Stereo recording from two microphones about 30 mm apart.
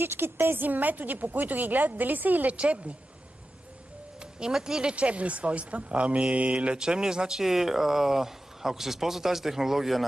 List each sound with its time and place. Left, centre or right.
0.6 s a woman's voice: right
2.5 s speech: right
4.2 s music: right
4.6 s speech: right
4.9 s speech: right
6.7 s speech: right; by 9.9 s centre